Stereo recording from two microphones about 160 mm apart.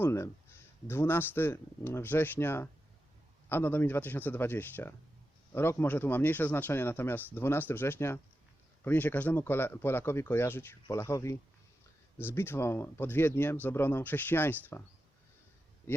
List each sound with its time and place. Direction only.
0.0 s speech: 15° left (ahead or behind)